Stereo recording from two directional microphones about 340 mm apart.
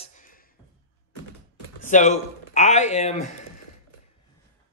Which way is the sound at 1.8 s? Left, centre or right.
Left.